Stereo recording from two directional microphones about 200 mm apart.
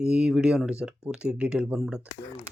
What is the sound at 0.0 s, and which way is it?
Speech, 5° right (ahead or behind).